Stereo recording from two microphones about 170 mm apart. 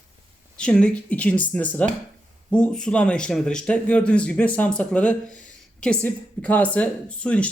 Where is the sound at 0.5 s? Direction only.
5° left (ahead or behind).